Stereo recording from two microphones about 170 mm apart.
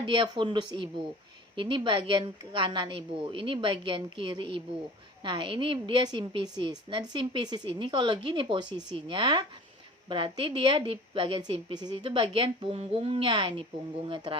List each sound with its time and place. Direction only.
0.0 s a woman's voice: 30° right (ahead or behind)